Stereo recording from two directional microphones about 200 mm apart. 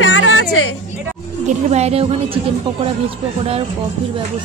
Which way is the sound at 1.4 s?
35° right (ahead or behind).